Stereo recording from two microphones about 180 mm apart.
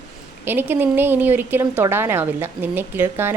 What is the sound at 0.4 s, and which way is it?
A woman's voice, 10° right (ahead or behind).